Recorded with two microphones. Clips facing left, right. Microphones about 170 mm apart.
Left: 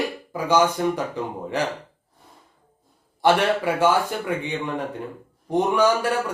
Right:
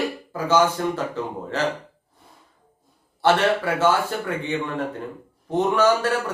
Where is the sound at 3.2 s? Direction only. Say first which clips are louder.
Even; 15° left (ahead or behind).